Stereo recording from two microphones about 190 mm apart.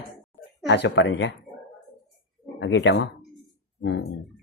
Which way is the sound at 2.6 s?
70° left (ahead or behind).